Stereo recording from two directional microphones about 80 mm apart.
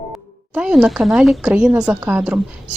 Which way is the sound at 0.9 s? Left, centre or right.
Centre.